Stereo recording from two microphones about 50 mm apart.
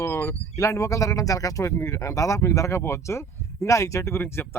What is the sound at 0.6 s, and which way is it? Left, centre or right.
Speech, left.